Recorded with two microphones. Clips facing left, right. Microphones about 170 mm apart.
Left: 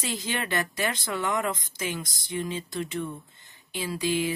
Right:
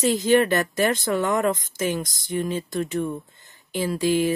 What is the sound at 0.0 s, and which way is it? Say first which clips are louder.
Speech: right 13 dB; 45° right (ahead or behind).